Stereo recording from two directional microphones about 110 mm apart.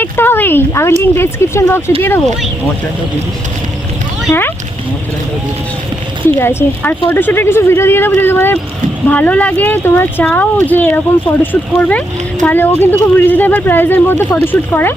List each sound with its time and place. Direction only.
0.0 s a sound: 20° left (ahead or behind)
1.1 s speech: 20° left (ahead or behind)
4.3 s speech: 20° left (ahead or behind)
6.2 s speech: 20° left (ahead or behind)